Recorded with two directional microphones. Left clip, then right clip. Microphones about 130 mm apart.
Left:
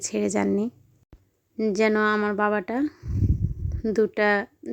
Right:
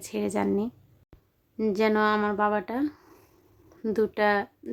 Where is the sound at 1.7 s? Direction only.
30° left (ahead or behind).